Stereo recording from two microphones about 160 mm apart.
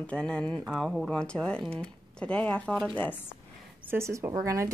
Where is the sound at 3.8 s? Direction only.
15° right (ahead or behind).